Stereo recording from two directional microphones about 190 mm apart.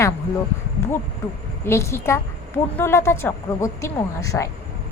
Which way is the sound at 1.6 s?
15° left (ahead or behind).